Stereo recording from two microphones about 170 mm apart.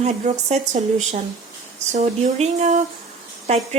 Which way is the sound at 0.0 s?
40° right (ahead or behind).